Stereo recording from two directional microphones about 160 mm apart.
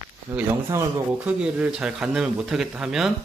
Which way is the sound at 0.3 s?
20° right (ahead or behind).